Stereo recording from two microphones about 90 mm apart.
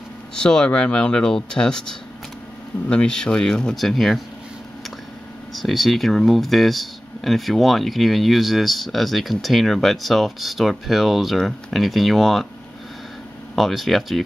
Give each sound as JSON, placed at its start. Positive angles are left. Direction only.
{"t": 0.3, "sound": "speech", "side_deg": 10}
{"t": 5.5, "sound": "speech", "side_deg": 0}
{"t": 13.6, "sound": "speech", "side_deg": 0}